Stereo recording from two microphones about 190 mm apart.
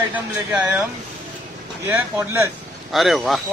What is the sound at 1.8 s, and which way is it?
Speech, 15° right (ahead or behind).